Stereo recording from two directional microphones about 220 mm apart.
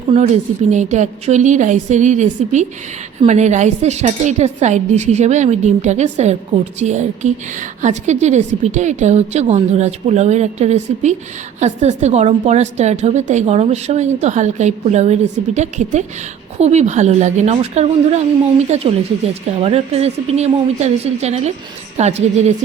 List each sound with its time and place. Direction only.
0.7 s a woman's voice: 30° right (ahead or behind)